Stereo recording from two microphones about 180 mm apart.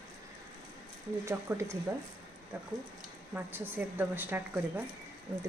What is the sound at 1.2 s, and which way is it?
Speech, 15° right (ahead or behind).